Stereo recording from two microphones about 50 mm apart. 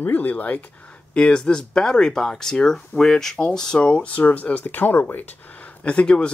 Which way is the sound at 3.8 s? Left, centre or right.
Left.